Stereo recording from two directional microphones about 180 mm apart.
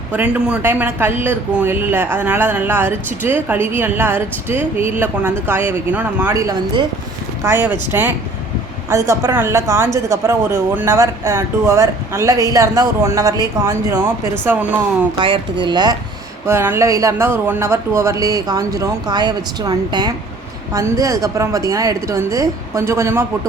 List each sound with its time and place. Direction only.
0.2 s speech: 5° right (ahead or behind)
6.3 s speech: 20° right (ahead or behind)
14.4 s speech: 10° right (ahead or behind)
15.2 s speech: 25° right (ahead or behind)